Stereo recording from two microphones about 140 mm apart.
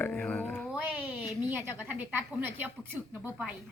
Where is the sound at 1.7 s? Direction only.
15° right (ahead or behind).